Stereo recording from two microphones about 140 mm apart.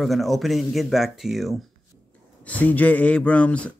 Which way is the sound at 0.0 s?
Centre (ahead or behind).